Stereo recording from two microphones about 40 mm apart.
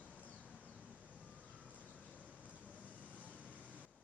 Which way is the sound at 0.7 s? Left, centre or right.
Right.